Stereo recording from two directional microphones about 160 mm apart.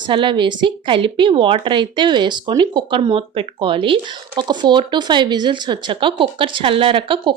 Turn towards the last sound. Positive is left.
turn(degrees=-30)  # may be behind; listen again after turning